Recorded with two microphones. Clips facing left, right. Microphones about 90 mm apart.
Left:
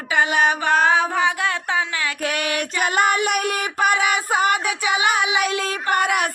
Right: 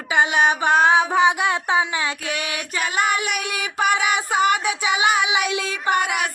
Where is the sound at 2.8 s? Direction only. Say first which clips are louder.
Left 3 dB; 50° left (ahead or behind).